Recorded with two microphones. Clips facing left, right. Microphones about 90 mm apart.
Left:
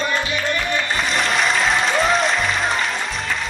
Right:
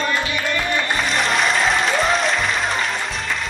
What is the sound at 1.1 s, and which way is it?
Applause, centre (ahead or behind).